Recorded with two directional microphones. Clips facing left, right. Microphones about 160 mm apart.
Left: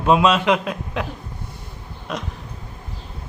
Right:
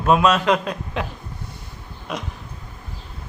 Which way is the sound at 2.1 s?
Centre (ahead or behind).